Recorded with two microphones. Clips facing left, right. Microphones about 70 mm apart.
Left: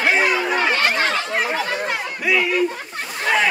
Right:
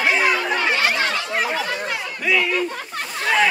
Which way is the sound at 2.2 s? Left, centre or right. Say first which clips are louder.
Left 1 dB; centre.